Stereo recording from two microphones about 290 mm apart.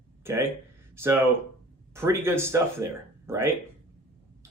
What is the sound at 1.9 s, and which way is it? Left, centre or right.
Speech, centre.